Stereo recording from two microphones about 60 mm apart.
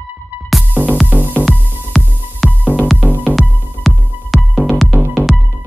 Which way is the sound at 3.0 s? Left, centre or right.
Right.